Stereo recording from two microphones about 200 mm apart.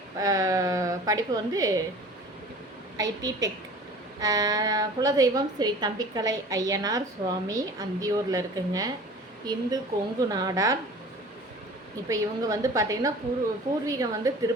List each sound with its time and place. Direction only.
0.2 s a woman's voice: 15° right (ahead or behind)
3.0 s a woman's voice: 20° right (ahead or behind)
12.0 s a woman's voice: 15° right (ahead or behind)